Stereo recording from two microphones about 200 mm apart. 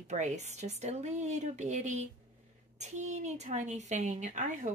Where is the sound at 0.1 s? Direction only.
35° right (ahead or behind).